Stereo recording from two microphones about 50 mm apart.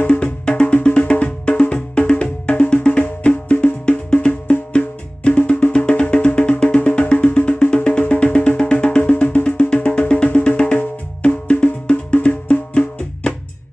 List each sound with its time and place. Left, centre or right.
0.1 s music: left